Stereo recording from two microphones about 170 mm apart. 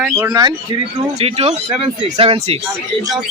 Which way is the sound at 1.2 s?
35° right (ahead or behind).